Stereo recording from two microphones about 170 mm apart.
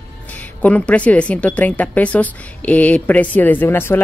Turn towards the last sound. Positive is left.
turn(degrees=15)  # may be behind; listen again after turning